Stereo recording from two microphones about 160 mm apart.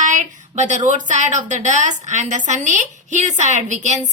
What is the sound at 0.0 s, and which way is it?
A woman's voice, 50° right (ahead or behind).